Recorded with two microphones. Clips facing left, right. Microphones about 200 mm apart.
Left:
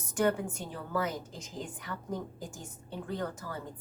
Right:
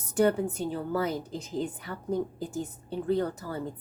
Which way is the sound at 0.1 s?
35° right (ahead or behind).